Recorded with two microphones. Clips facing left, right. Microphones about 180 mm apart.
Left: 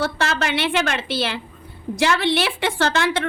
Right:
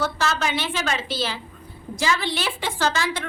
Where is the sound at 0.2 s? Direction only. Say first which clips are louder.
Left 2 dB; 65° left (ahead or behind).